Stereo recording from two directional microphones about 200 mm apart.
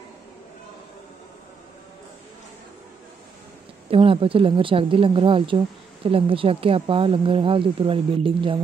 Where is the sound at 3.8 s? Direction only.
25° right (ahead or behind).